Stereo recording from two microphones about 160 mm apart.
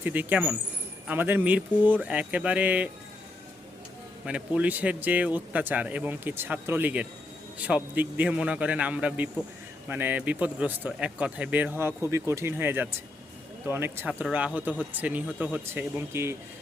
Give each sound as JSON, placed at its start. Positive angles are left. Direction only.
{"t": 0.0, "sound": "speech", "side_deg": -10}
{"t": 4.3, "sound": "speech", "side_deg": -5}